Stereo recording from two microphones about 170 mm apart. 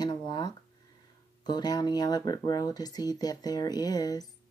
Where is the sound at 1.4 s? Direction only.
25° left (ahead or behind).